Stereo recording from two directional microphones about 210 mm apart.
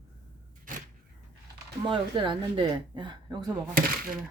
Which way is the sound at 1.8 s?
25° right (ahead or behind).